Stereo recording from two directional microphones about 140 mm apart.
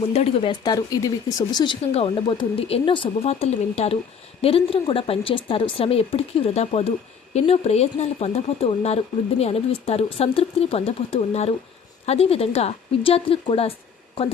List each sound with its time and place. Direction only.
0.0 s speech: 45° left (ahead or behind)
0.6 s speech: 30° left (ahead or behind)
1.8 s a woman's voice: 45° left (ahead or behind)